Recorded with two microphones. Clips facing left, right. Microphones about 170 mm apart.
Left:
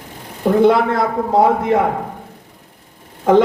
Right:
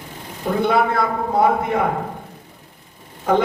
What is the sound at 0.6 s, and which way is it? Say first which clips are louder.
A man's voice: left 4 dB; 90° left.